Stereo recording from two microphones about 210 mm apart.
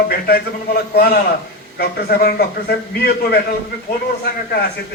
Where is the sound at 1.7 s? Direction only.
50° left (ahead or behind).